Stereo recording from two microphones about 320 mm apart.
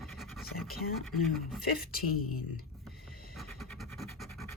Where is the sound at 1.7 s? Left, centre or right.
Left.